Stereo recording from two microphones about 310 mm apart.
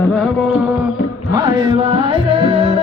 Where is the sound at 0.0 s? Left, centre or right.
Centre.